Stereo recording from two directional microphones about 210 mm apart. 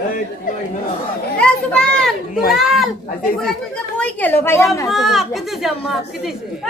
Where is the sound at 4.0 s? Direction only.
5° left (ahead or behind).